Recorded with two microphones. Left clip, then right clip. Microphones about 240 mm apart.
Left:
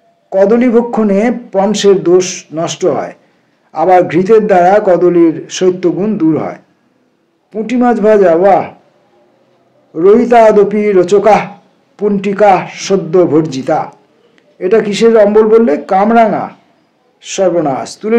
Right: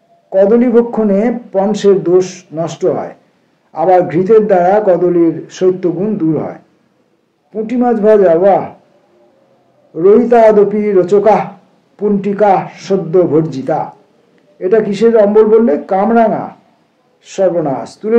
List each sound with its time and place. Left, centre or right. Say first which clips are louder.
0.5 s a man's voice: even; left
9.9 s a man's voice: left 1 dB; left